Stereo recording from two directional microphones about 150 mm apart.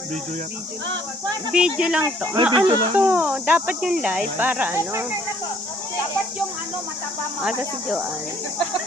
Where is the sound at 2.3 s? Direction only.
35° right (ahead or behind).